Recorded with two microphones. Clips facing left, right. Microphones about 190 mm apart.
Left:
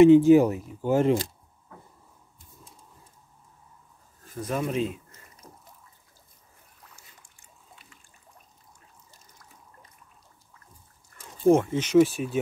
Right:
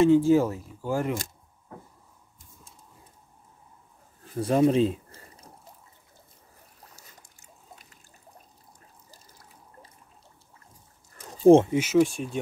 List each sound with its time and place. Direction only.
0.0 s speech: 20° left (ahead or behind)
4.4 s a sound: 30° right (ahead or behind)
6.8 s trickle: 35° right (ahead or behind)
9.1 s water: 30° right (ahead or behind)
11.1 s a sound: 30° right (ahead or behind)
11.7 s speech: 5° right (ahead or behind)
12.0 s speech: 5° left (ahead or behind)